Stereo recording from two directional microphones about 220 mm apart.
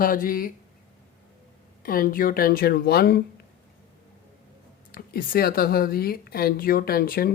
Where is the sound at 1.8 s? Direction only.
40° left (ahead or behind).